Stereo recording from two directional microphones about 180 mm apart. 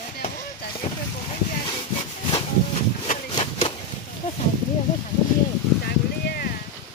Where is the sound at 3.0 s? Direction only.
35° left (ahead or behind).